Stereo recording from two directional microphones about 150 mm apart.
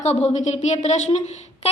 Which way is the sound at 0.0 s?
50° left (ahead or behind).